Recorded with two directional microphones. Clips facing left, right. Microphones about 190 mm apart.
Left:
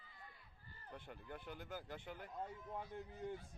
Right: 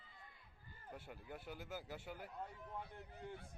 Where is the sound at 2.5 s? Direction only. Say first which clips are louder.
Left 2 dB; 65° right (ahead or behind).